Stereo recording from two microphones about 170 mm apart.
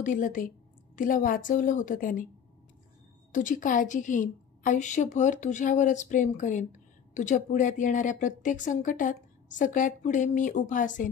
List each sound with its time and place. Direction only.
0.0 s a woman's voice: 50° left (ahead or behind)
3.3 s a woman's voice: 50° left (ahead or behind)